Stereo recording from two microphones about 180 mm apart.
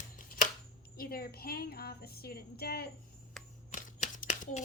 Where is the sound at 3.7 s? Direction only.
45° left (ahead or behind).